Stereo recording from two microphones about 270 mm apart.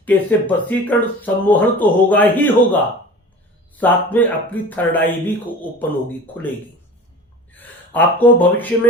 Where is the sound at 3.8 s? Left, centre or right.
Centre.